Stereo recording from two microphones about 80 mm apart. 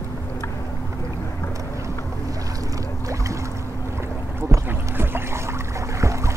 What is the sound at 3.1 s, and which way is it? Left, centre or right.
Boat, right.